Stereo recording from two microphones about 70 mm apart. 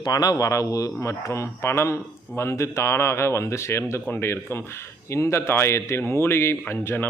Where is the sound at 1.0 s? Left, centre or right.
Left.